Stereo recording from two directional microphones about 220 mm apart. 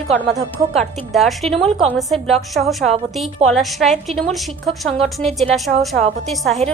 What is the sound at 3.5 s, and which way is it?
Speech, centre (ahead or behind).